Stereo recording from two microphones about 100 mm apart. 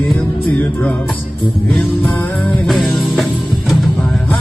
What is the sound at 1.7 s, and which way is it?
Music, centre (ahead or behind).